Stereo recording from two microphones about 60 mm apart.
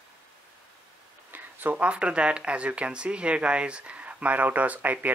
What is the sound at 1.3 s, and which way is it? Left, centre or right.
Speech, right.